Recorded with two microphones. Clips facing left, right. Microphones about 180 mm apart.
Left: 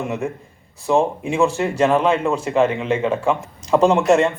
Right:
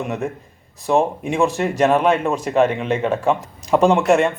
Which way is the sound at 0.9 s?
15° right (ahead or behind).